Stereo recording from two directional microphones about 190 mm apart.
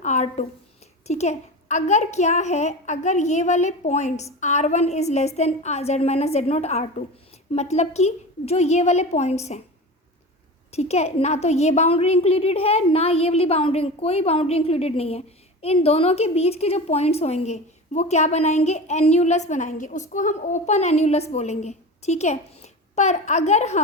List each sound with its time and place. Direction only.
0.0 s a woman's voice: 35° left (ahead or behind)
10.7 s a woman's voice: 35° left (ahead or behind)